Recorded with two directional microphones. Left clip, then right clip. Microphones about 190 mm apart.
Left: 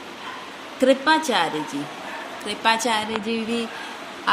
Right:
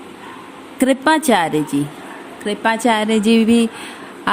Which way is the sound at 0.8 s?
55° right (ahead or behind).